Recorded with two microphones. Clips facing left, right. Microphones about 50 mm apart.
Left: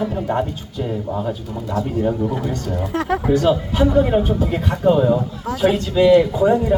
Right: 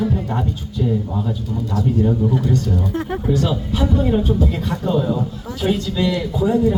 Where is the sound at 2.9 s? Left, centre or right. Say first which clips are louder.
Left 3 dB; left.